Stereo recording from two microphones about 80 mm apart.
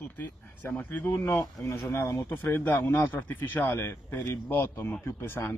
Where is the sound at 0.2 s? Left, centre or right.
Left.